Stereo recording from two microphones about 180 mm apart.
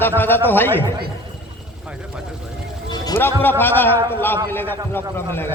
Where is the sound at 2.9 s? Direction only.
20° left (ahead or behind).